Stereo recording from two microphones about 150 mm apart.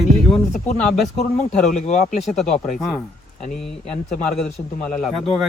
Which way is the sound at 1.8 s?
50° left (ahead or behind).